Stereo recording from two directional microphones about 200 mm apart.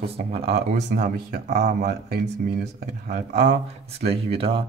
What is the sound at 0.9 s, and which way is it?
Speech, 50° right (ahead or behind).